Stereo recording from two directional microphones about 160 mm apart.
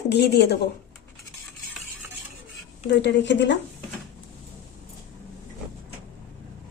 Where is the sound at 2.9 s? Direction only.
90° left.